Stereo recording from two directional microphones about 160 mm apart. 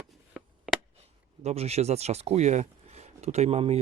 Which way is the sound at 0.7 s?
5° right (ahead or behind).